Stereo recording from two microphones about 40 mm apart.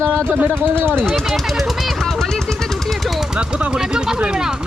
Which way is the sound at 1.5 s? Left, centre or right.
Centre.